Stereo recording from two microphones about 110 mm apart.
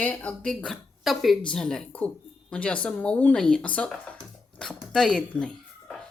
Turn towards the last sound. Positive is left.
turn(degrees=10)  # may be behind; listen again after turning